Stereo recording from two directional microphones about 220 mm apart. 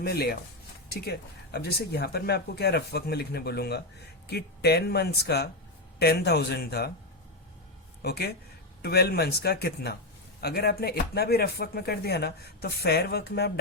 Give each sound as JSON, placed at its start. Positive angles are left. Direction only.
{"t": 0.0, "sound": "speech", "side_deg": 45}
{"t": 8.0, "sound": "speech", "side_deg": 45}